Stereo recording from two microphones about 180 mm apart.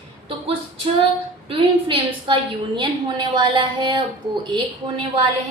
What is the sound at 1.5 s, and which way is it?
A woman's voice, 30° right (ahead or behind).